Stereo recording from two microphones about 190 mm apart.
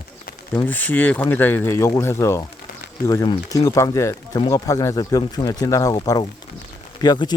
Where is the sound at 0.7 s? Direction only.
10° left (ahead or behind).